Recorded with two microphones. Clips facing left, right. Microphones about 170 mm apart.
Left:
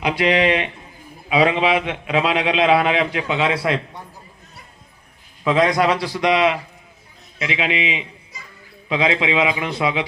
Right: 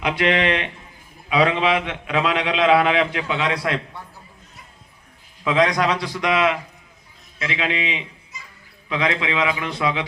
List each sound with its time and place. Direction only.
0.2 s a man's voice: 10° left (ahead or behind)
5.5 s speech: 5° left (ahead or behind)
7.3 s a man's voice: 15° left (ahead or behind)